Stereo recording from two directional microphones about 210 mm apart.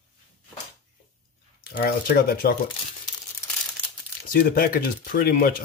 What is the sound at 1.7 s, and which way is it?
Speech, 45° left (ahead or behind).